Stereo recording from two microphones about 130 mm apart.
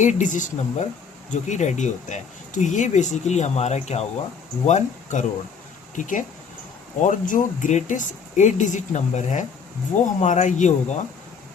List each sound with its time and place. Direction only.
0.0 s speech: 70° left (ahead or behind)
6.0 s speech: 85° left; by 11.0 s 65° left (ahead or behind)